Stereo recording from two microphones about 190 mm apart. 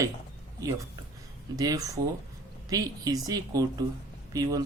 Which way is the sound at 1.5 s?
20° right (ahead or behind).